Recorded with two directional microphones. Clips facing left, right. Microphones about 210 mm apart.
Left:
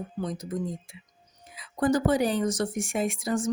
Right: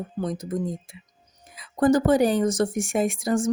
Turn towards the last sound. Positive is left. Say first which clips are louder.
# right 4 dB
turn(degrees=-45)  # may be behind; listen again after turning